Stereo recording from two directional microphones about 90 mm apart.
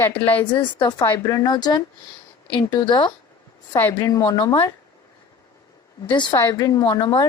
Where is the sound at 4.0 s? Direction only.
40° left (ahead or behind).